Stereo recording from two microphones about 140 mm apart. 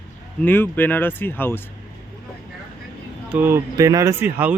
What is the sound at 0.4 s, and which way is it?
Speech, 15° left (ahead or behind).